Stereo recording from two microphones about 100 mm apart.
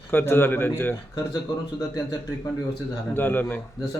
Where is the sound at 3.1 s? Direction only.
20° left (ahead or behind).